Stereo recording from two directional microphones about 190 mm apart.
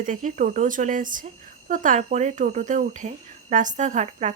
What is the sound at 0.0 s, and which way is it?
Speech, 40° right (ahead or behind).